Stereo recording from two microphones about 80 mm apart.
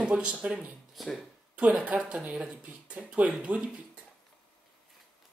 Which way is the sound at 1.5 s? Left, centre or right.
Centre.